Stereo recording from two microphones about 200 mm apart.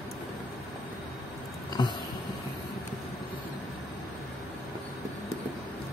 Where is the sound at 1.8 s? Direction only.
20° left (ahead or behind).